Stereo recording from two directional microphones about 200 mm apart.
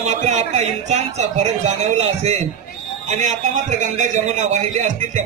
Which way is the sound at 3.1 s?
40° right (ahead or behind).